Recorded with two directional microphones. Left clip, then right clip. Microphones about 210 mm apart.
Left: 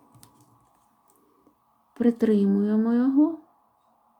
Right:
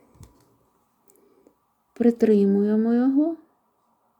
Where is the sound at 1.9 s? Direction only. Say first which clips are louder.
Right 4 dB; 20° right (ahead or behind).